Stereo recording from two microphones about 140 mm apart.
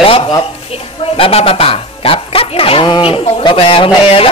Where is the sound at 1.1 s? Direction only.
45° left (ahead or behind).